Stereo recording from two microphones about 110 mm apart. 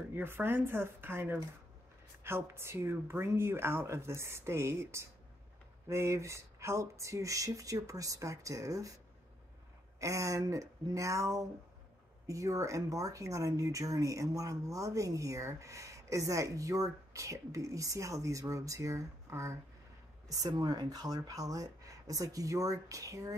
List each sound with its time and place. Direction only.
0.1 s speech: 20° right (ahead or behind)
9.9 s speech: 30° right (ahead or behind)